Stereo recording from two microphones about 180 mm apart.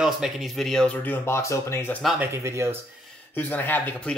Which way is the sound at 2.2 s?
15° right (ahead or behind).